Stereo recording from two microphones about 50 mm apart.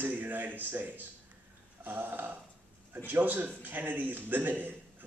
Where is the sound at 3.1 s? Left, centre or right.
Right.